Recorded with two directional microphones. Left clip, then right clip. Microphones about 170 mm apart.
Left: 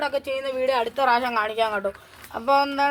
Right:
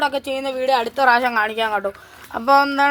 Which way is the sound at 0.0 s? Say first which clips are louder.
Right 4 dB; 50° right (ahead or behind).